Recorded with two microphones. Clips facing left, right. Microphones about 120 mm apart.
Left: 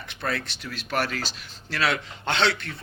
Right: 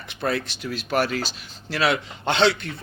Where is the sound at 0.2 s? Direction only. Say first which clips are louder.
Right 5 dB; 20° right (ahead or behind).